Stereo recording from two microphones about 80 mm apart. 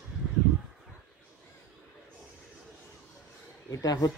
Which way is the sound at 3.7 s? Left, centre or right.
Left.